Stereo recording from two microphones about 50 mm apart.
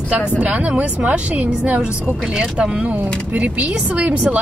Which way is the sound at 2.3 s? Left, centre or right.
Centre.